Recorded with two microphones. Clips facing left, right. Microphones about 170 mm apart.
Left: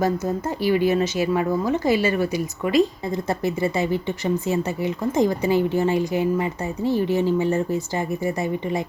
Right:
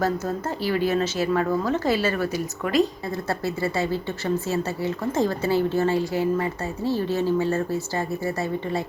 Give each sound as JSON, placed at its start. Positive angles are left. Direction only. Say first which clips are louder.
{"t": 0.0, "sound": "a woman's voice", "louder": "left 2 dB", "side_deg": 15}